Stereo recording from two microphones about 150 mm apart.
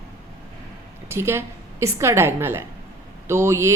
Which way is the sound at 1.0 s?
15° right (ahead or behind).